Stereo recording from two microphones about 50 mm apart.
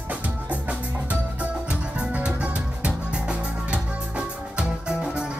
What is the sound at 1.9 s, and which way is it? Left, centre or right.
Music, right.